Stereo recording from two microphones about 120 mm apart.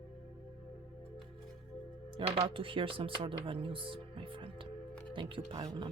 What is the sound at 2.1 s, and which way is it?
Speech, 50° right (ahead or behind).